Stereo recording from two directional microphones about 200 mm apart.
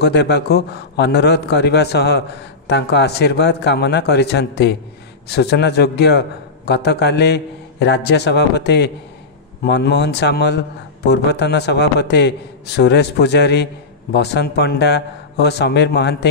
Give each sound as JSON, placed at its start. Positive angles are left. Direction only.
{"t": 0.0, "sound": "a man's voice", "side_deg": 55}